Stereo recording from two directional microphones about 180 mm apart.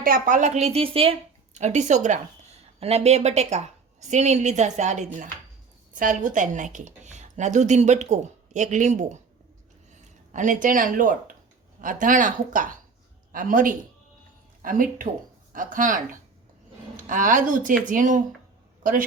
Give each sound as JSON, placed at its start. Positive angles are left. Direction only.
{"t": 0.0, "sound": "a woman's voice", "side_deg": -50}
{"t": 10.3, "sound": "a man's voice", "side_deg": -45}